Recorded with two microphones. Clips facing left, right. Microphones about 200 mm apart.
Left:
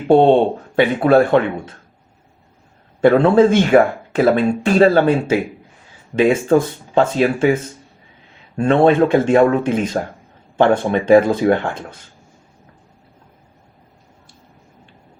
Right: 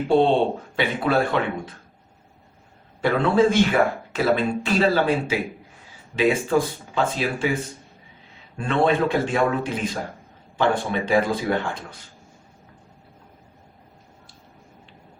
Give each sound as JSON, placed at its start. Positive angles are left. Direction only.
{"t": 0.1, "sound": "speech", "side_deg": 55}
{"t": 3.0, "sound": "speech", "side_deg": 50}
{"t": 8.5, "sound": "speech", "side_deg": 50}